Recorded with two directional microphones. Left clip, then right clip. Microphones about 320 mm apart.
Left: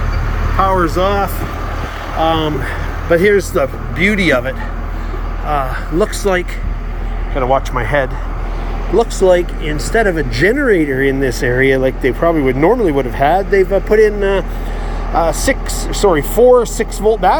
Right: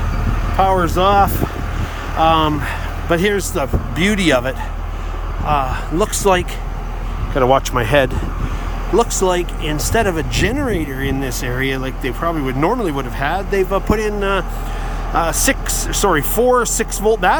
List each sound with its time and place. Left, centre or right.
0.6 s speech: centre